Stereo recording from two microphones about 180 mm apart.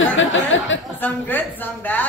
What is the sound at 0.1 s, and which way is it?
Speech, 90° left.